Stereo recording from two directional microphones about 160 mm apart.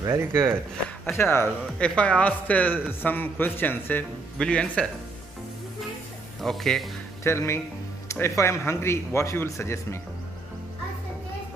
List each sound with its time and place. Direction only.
0.0 s speech: 15° right (ahead or behind)
1.1 s speech: 15° left (ahead or behind)
6.4 s speech: centre (ahead or behind)
7.2 s speech: 15° left (ahead or behind)